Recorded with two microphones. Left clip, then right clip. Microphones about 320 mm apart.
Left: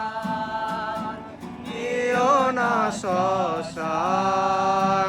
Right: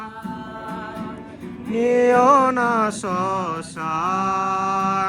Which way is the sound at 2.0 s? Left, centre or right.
Centre.